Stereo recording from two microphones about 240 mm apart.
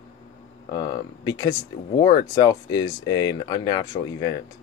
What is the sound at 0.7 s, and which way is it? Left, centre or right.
Speech, centre.